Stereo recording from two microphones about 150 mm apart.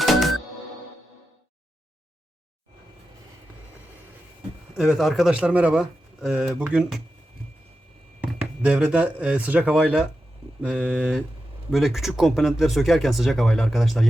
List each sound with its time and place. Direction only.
0.0 s music: centre (ahead or behind)
4.8 s speech: centre (ahead or behind)
8.6 s a man's voice: 5° right (ahead or behind)